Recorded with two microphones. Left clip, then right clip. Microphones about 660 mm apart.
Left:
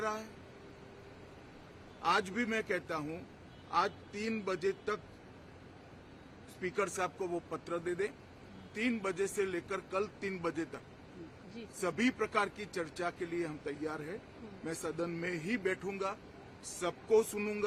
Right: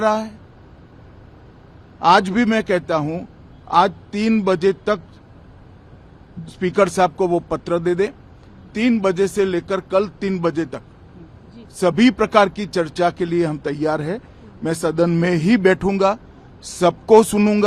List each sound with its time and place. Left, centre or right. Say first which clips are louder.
0.0 s speech: right 19 dB; right
2.0 s speech: right 18 dB; right
6.6 s speech: right 19 dB; right
11.8 s speech: right 18 dB; right